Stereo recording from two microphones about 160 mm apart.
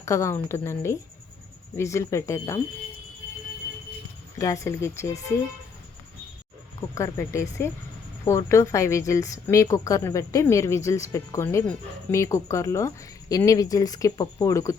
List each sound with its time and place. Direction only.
0.0 s a woman's voice: 20° left (ahead or behind)
4.4 s a woman's voice: 20° left (ahead or behind)
6.9 s a woman's voice: 20° left (ahead or behind)